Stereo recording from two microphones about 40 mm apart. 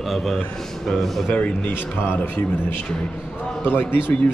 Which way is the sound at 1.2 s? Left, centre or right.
Left.